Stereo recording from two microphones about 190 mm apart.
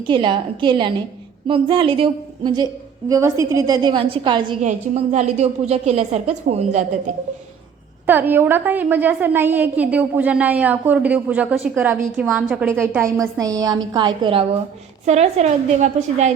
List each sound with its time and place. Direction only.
0.0 s a woman's voice: 25° right (ahead or behind)
4.6 s a woman's voice: 40° right (ahead or behind)
8.0 s a woman's voice: 10° right (ahead or behind); by 16.3 s 35° right (ahead or behind)